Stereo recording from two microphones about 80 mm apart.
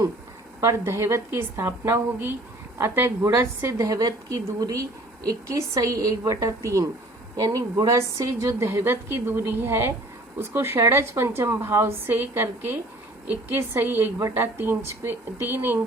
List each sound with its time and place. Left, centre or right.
0.6 s a woman's voice: right
3.8 s a woman's voice: right
7.9 s a woman's voice: right
14.2 s a woman's voice: right
14.4 s a woman's voice: right